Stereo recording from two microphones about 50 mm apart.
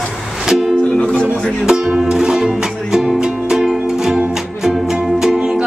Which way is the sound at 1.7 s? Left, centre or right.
Centre.